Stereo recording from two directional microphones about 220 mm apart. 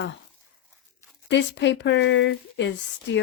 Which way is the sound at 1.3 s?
55° left (ahead or behind).